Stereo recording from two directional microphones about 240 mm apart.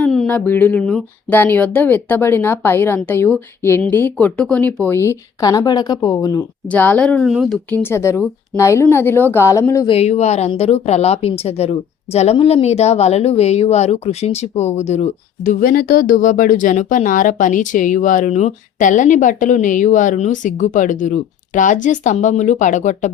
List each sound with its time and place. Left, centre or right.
0.0 s speech: centre
9.9 s speech: left
15.4 s speech: left